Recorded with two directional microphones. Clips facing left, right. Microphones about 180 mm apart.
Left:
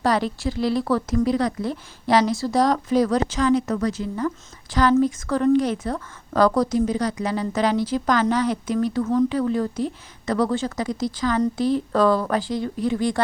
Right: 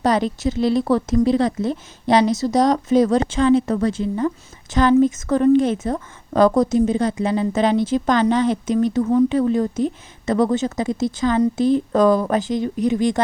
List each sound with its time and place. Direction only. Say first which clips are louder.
0.0 s a woman's voice: right 3 dB; 20° right (ahead or behind)